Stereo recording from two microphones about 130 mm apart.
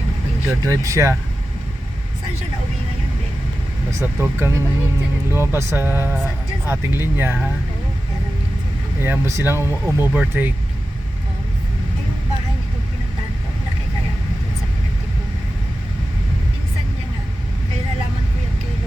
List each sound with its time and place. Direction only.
0.4 s speech: 25° right (ahead or behind)
4.0 s speech: 20° right (ahead or behind)
9.0 s speech: 20° right (ahead or behind)